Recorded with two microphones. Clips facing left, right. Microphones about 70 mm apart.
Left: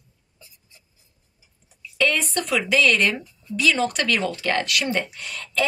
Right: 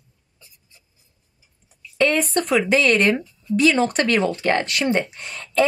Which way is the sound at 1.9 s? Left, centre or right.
Right.